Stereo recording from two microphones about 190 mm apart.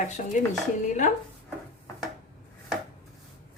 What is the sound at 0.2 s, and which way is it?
Speech, 40° left (ahead or behind).